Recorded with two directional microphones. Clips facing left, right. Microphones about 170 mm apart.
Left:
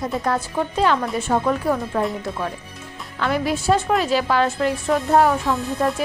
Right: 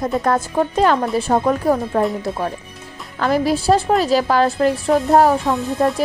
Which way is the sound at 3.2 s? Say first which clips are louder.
Right 5 dB; 35° right (ahead or behind).